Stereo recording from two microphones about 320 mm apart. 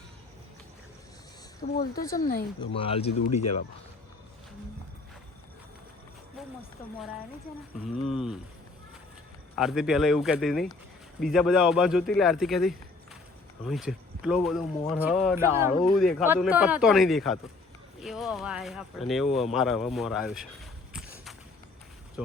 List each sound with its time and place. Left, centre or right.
1.6 s speech: left
2.0 s speech: centre
7.9 s speech: centre
9.6 s speech: centre